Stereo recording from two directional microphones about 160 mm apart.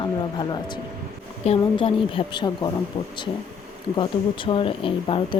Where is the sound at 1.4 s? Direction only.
40° left (ahead or behind).